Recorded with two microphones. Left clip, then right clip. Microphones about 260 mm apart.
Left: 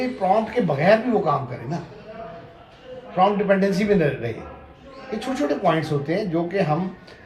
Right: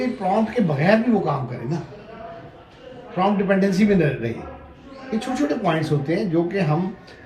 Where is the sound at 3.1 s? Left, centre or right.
Left.